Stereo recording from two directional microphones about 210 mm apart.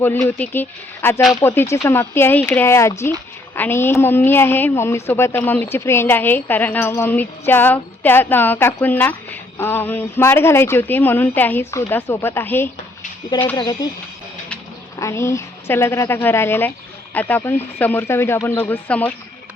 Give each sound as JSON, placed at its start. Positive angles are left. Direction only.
{"t": 0.0, "sound": "a woman's voice", "side_deg": 10}
{"t": 13.6, "sound": "a woman's voice", "side_deg": 20}